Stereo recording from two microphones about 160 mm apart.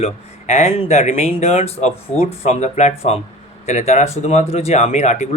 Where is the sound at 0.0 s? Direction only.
45° left (ahead or behind).